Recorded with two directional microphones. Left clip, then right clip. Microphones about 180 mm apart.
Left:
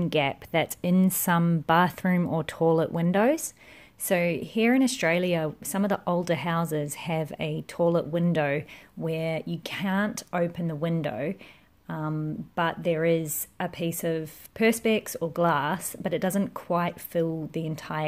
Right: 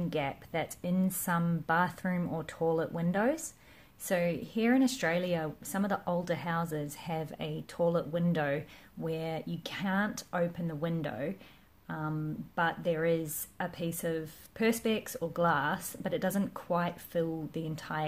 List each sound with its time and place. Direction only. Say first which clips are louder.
0.1 s a woman's voice: left 9 dB; 50° left (ahead or behind)